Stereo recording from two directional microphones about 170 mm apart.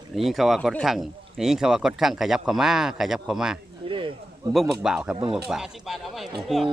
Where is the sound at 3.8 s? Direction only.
30° right (ahead or behind).